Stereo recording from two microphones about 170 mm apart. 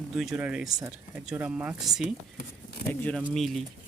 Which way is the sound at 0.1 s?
5° right (ahead or behind).